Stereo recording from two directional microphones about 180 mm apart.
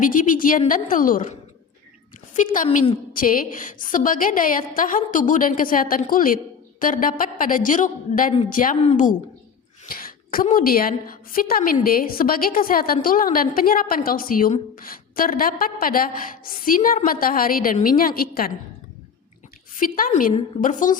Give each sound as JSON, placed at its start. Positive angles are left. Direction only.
{"t": 0.0, "sound": "a woman's voice", "side_deg": 50}
{"t": 9.9, "sound": "a sound", "side_deg": 55}
{"t": 10.4, "sound": "a woman's voice", "side_deg": 50}
{"t": 19.7, "sound": "a woman's voice", "side_deg": 50}